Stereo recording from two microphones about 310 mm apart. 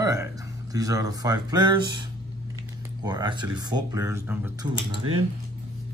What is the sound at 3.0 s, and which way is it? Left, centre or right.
Speech, centre.